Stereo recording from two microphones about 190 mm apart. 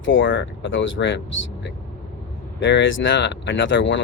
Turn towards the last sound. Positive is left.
turn(degrees=75)  # may be behind; listen again after turning